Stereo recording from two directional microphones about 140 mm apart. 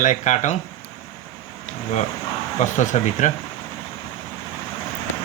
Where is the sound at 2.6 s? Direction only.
60° left (ahead or behind).